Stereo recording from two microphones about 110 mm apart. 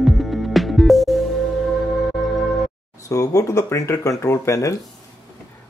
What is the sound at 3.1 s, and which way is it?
Speech, 30° left (ahead or behind).